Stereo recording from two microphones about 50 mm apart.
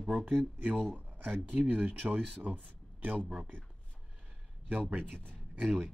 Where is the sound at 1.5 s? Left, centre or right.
Right.